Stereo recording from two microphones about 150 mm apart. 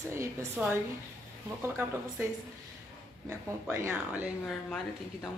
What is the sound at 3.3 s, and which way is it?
Speech, 20° right (ahead or behind).